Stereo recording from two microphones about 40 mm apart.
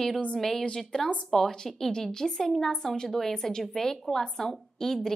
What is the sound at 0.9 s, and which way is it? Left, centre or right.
A woman's voice, centre.